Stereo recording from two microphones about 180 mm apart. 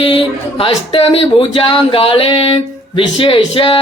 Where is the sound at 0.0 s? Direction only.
30° left (ahead or behind).